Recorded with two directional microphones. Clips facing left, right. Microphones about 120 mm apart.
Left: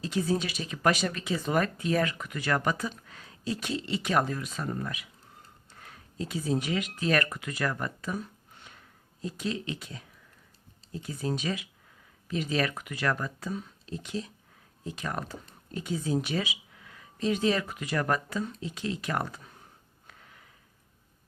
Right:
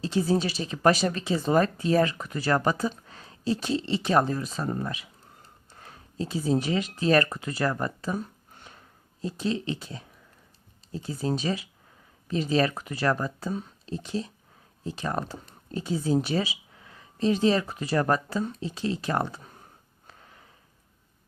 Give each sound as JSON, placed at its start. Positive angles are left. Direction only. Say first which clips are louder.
{"t": 0.0, "sound": "speech", "louder": "right 4 dB", "side_deg": -30}
{"t": 20.1, "sound": "sniff", "louder": "right 2 dB", "side_deg": -30}